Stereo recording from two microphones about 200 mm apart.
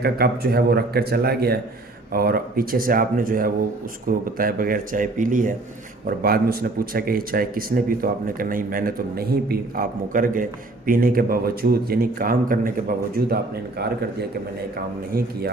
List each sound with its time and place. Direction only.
0.0 s speech: 50° right (ahead or behind)